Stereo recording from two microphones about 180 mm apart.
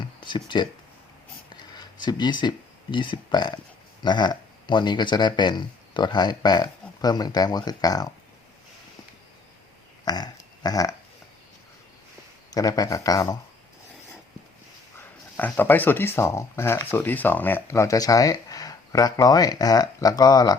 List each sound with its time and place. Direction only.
0.2 s speech: 25° left (ahead or behind)
1.7 s speech: 25° left (ahead or behind)
10.1 s a sound: 20° left (ahead or behind)
12.5 s speech: 20° left (ahead or behind)
15.4 s speech: 10° left (ahead or behind)